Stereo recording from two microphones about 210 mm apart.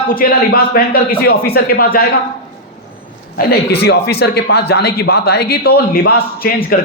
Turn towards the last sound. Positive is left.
turn(degrees=45)  # may be behind; listen again after turning